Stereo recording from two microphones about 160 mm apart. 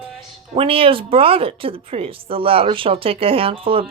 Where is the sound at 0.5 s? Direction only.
35° right (ahead or behind).